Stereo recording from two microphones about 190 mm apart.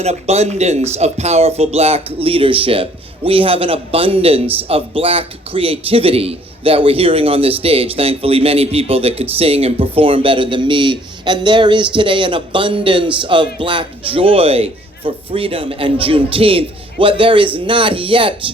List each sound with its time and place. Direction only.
0.0 s a man's voice: 35° right (ahead or behind)